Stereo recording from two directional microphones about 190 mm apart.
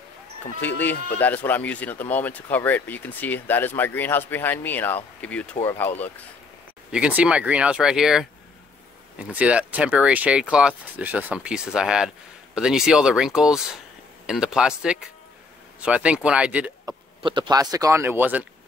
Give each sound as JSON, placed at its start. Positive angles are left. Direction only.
{"t": 0.7, "sound": "speech", "side_deg": 10}
{"t": 6.9, "sound": "speech", "side_deg": -5}
{"t": 9.3, "sound": "speech", "side_deg": -5}
{"t": 16.8, "sound": "speech", "side_deg": -25}